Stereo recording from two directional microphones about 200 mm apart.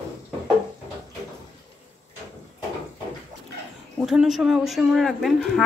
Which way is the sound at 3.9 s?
Centre (ahead or behind).